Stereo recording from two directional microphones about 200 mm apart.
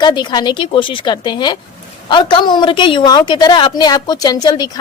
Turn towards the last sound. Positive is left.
turn(degrees=20)  # may be behind; listen again after turning